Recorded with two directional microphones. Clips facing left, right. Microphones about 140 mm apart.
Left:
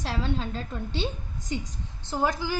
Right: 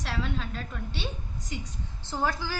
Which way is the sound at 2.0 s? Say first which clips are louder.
Left 3 dB; 15° left (ahead or behind).